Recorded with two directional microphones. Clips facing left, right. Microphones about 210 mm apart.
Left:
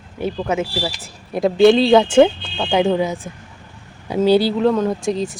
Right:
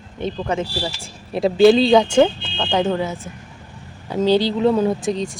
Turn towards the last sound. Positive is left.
turn(degrees=0)  # may be behind; listen again after turning